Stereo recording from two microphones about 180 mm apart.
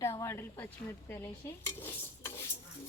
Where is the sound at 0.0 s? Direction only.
15° left (ahead or behind).